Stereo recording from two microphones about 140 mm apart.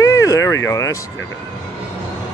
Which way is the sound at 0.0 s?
25° left (ahead or behind).